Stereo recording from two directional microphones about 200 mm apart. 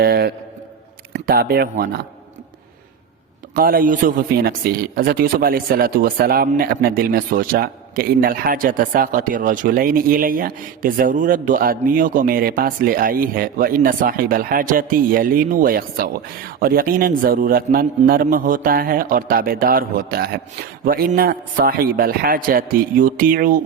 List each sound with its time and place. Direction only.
0.0 s a sound: 50° right (ahead or behind)
1.1 s speech: 50° right (ahead or behind)
3.5 s speech: 45° right (ahead or behind)